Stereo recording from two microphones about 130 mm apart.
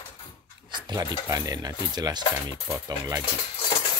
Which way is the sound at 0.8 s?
30° right (ahead or behind).